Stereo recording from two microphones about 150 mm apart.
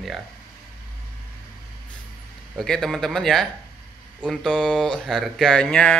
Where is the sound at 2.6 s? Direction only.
Centre (ahead or behind).